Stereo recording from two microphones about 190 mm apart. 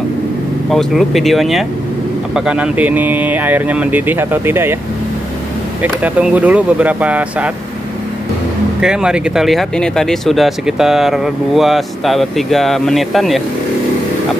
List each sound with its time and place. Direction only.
0.7 s speech: centre (ahead or behind)
5.8 s speech: 10° right (ahead or behind)
8.8 s speech: 5° right (ahead or behind)